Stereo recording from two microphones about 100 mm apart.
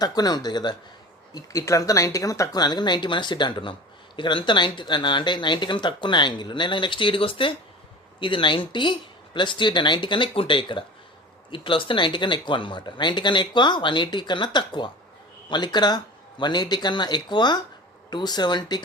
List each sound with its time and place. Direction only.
0.0 s speech: 40° left (ahead or behind)